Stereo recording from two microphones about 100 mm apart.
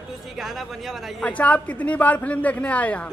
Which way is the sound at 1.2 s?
15° left (ahead or behind).